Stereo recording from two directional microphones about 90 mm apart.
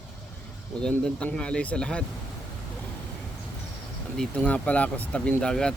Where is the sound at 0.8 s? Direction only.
10° left (ahead or behind).